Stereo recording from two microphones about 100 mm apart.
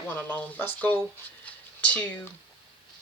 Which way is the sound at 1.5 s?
15° left (ahead or behind).